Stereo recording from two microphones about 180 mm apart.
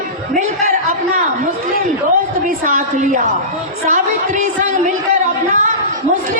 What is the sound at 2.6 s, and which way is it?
A man's voice, 45° right (ahead or behind).